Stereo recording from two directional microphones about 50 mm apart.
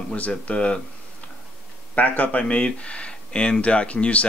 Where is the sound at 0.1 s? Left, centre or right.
Left.